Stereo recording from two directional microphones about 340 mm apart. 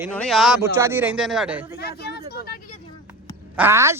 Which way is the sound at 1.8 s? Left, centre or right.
Left.